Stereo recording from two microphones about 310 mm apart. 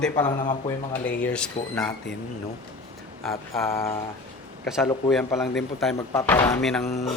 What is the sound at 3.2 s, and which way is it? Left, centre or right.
Speech, centre.